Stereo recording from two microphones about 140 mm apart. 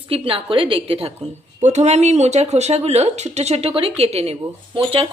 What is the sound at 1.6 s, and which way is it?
Speech, 55° right (ahead or behind).